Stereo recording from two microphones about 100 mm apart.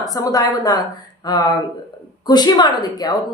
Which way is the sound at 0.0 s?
40° left (ahead or behind).